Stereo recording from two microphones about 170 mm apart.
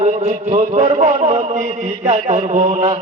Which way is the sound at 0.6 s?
45° right (ahead or behind).